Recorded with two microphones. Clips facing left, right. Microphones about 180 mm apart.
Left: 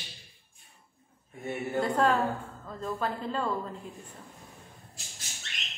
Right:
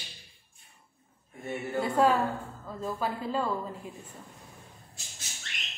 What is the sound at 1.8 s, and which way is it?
A woman's voice, 5° right (ahead or behind).